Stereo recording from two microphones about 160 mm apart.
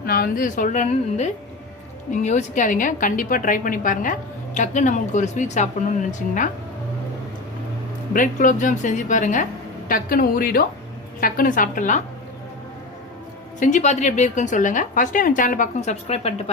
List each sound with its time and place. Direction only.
0.0 s a woman's voice: 65° left (ahead or behind)
8.1 s a woman's voice: 55° left (ahead or behind)
9.9 s a woman's voice: 65° left (ahead or behind)
13.6 s a woman's voice: 50° left (ahead or behind)